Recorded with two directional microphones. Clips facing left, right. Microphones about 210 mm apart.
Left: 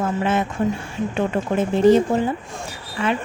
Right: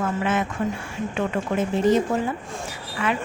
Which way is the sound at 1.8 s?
30° left (ahead or behind).